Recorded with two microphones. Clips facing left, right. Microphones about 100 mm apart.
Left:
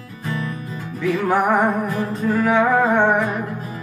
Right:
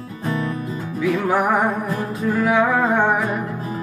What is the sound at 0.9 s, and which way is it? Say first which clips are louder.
Music: even; 5° right (ahead or behind).